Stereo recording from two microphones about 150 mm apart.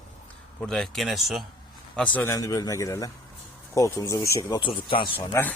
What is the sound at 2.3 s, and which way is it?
Speech, 20° left (ahead or behind).